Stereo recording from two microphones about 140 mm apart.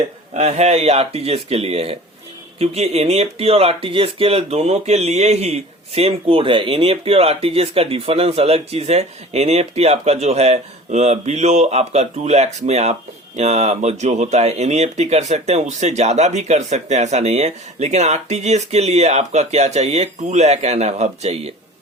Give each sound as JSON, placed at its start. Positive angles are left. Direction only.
{"t": 0.3, "sound": "speech", "side_deg": -50}